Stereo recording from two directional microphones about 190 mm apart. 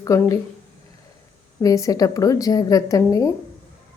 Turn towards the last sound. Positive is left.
turn(degrees=15)  # may be behind; listen again after turning